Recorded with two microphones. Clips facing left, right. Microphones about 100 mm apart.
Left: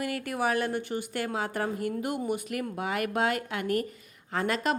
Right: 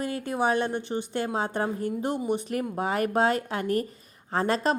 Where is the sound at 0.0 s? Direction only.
25° right (ahead or behind).